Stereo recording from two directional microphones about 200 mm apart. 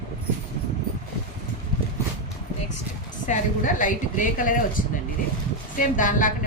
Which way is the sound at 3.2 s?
40° left (ahead or behind).